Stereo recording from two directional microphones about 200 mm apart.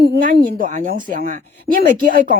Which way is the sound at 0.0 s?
60° right (ahead or behind).